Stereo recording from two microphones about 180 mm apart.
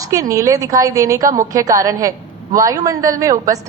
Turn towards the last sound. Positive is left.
turn(degrees=-20)  # may be behind; listen again after turning